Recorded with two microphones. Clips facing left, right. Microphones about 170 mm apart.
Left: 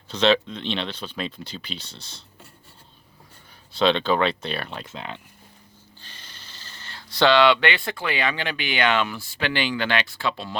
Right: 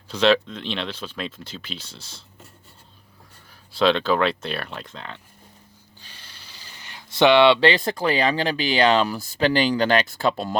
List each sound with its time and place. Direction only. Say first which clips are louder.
0.1 s speech: right 1 dB; 5° right (ahead or behind)
3.7 s speech: right 1 dB; 5° right (ahead or behind)
4.9 s speech: left 3 dB; 15° left (ahead or behind)
6.0 s speech: left 1 dB; 10° right (ahead or behind); by 10.6 s 45° right (ahead or behind)